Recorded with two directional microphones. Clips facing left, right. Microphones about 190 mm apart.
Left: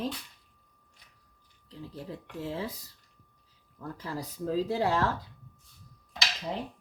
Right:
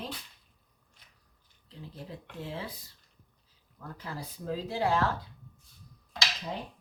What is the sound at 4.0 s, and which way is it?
Speech, 35° left (ahead or behind).